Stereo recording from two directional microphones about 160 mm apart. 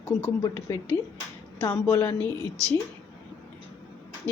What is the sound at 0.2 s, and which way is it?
A woman's voice, 20° left (ahead or behind).